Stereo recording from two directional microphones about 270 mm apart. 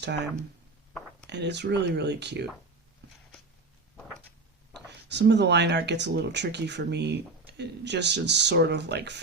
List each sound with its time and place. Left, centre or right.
1.3 s speech: right
4.9 s speech: right